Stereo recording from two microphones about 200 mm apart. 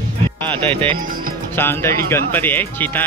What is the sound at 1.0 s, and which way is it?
Speech, 45° right (ahead or behind).